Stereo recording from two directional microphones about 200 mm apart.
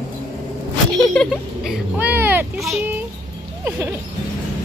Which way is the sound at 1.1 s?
Centre (ahead or behind).